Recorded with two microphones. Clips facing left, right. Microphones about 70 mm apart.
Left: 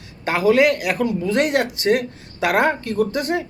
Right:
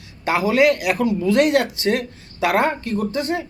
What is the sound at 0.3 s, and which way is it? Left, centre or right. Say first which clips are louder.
Speech: left 1 dB; left.